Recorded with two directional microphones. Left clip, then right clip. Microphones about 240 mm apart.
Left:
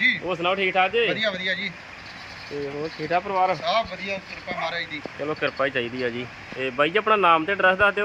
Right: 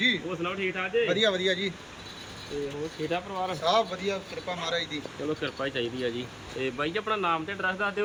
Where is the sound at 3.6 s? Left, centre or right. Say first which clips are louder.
Left 1 dB; centre.